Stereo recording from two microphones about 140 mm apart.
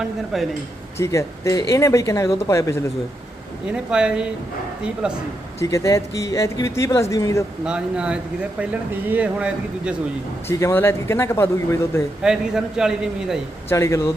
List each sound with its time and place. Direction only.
0.9 s speech: 20° left (ahead or behind)
3.7 s speech: 5° right (ahead or behind)
5.5 s speech: 20° left (ahead or behind)
7.6 s speech: 5° right (ahead or behind)
10.5 s speech: 20° left (ahead or behind)
12.2 s a man's voice: 5° right (ahead or behind)
13.7 s speech: 20° left (ahead or behind)